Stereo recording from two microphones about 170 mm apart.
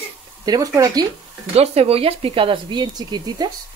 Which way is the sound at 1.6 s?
35° right (ahead or behind).